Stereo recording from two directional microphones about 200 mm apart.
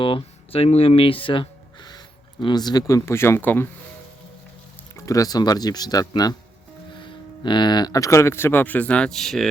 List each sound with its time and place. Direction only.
0.0 s speech: 25° left (ahead or behind); by 3.7 s 10° left (ahead or behind)
4.9 s speech: 15° left (ahead or behind)